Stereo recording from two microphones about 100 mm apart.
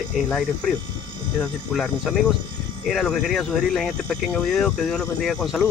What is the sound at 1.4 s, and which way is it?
Speech, 5° left (ahead or behind).